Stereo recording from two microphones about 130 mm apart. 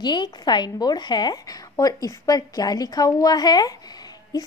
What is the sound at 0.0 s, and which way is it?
A woman's voice, 35° left (ahead or behind).